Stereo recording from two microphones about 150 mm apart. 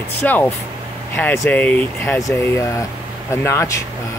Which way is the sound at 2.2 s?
20° left (ahead or behind).